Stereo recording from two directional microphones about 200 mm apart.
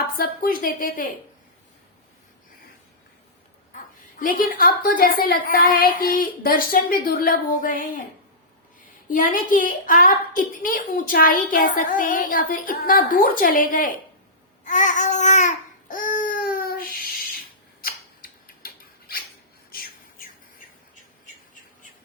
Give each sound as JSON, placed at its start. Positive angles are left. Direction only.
{"t": 0.2, "sound": "a woman's voice", "side_deg": 45}
{"t": 3.7, "sound": "dog", "side_deg": 40}
{"t": 4.2, "sound": "a woman's voice", "side_deg": 45}
{"t": 9.0, "sound": "a woman's voice", "side_deg": 40}
{"t": 14.6, "sound": "babbling", "side_deg": 40}
{"t": 17.8, "sound": "scissors", "side_deg": 45}
{"t": 19.7, "sound": "a sound", "side_deg": 45}